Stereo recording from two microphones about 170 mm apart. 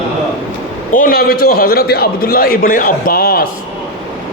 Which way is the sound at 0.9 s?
60° left (ahead or behind).